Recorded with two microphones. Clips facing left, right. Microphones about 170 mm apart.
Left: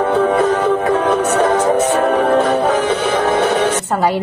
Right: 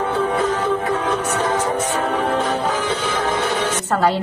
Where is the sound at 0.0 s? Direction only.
60° left (ahead or behind).